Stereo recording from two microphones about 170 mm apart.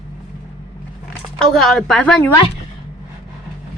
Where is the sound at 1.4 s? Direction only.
Centre (ahead or behind).